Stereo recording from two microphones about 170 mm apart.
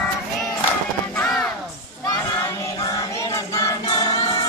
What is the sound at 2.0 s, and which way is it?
Child singing, 20° left (ahead or behind).